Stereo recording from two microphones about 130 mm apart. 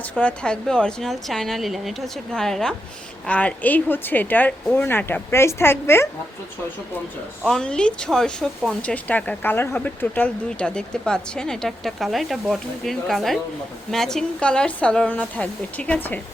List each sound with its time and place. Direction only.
0.0 s a woman's voice: 10° left (ahead or behind)
7.4 s a woman's voice: 5° left (ahead or behind)